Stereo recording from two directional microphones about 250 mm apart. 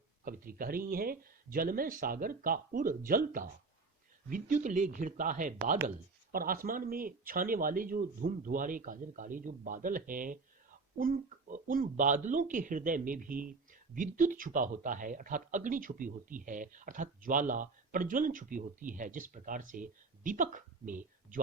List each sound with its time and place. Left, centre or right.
0.3 s speech: right